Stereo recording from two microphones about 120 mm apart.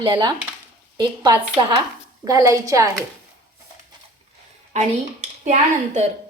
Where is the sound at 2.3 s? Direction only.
30° right (ahead or behind).